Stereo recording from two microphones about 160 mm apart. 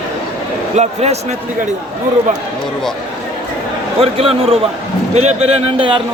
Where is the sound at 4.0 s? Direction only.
40° right (ahead or behind).